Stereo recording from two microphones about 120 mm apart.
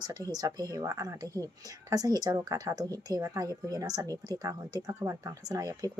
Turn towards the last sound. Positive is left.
turn(degrees=-25)  # may be behind; listen again after turning